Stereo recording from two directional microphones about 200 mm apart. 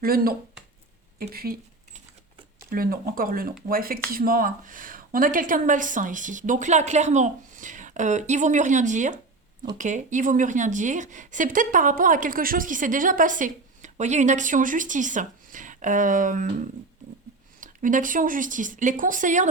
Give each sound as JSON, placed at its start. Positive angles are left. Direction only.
{"t": 0.0, "sound": "speech", "side_deg": -50}
{"t": 2.6, "sound": "a woman's voice", "side_deg": -45}
{"t": 17.6, "sound": "a woman's voice", "side_deg": -40}